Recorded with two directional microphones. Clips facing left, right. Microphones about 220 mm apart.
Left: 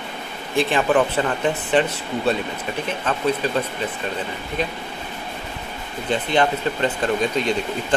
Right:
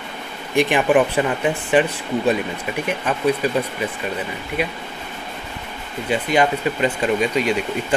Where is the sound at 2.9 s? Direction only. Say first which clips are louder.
Right 3 dB; 10° right (ahead or behind).